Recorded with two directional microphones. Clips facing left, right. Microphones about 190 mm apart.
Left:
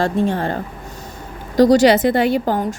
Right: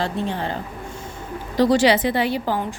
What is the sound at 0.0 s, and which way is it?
A woman's voice, 50° left (ahead or behind).